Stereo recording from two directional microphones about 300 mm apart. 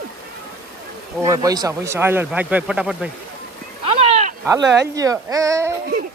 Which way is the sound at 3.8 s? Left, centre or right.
Centre.